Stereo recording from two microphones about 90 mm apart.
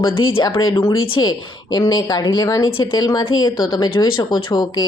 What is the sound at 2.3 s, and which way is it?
A woman's voice, 40° left (ahead or behind).